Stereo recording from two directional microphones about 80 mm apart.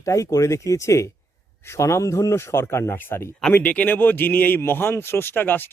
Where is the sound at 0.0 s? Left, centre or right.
Left.